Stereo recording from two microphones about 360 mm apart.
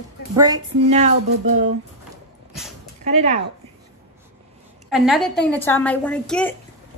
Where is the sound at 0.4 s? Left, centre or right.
Centre.